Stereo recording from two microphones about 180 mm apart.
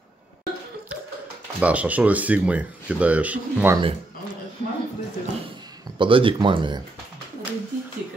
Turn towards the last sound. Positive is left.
turn(degrees=-25)  # may be behind; listen again after turning